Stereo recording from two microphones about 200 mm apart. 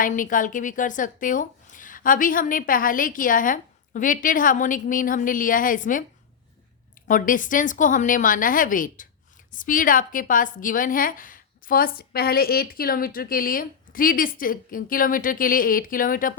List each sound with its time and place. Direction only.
0.0 s a woman's voice: 40° left (ahead or behind)
7.1 s a woman's voice: 40° left (ahead or behind)